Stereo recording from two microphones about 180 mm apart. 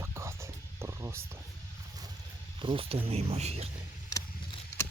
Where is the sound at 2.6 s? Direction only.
30° right (ahead or behind).